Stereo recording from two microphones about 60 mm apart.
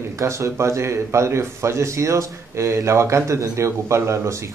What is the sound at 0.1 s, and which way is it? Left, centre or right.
Speech, right.